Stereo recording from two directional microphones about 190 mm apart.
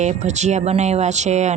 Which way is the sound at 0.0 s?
35° right (ahead or behind).